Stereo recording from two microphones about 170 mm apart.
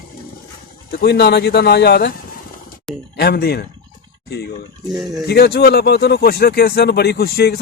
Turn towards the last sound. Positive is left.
turn(degrees=70)  # may be behind; listen again after turning